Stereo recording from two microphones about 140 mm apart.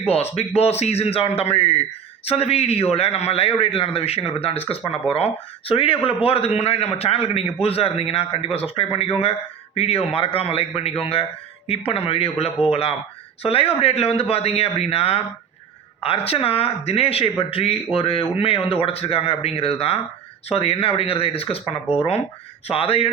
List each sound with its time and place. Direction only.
0.0 s speech: 45° left (ahead or behind)